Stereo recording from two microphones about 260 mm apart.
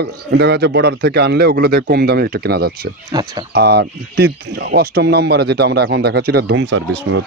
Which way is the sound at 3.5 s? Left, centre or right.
Right.